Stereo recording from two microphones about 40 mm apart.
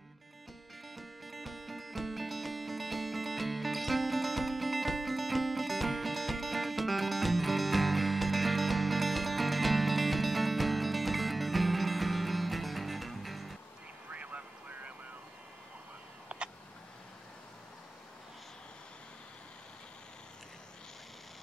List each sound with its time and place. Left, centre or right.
0.9 s music: centre
14.1 s vehicle: right
16.3 s a sound: right